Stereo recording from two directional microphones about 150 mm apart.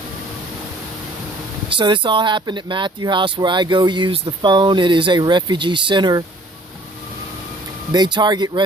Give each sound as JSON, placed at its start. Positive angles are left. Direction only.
{"t": 1.7, "sound": "speech", "side_deg": -30}
{"t": 7.9, "sound": "speech", "side_deg": -30}